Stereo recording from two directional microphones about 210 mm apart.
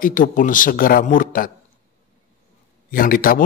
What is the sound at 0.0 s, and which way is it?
Speech, 40° left (ahead or behind).